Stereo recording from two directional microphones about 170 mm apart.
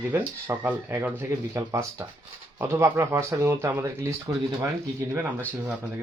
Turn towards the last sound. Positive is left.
turn(degrees=-10)  # may be behind; listen again after turning